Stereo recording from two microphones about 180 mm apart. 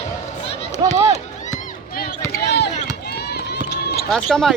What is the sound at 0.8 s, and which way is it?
Speech, 25° right (ahead or behind).